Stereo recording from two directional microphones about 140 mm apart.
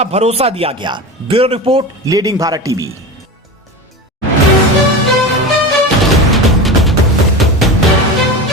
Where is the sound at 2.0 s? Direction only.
25° right (ahead or behind).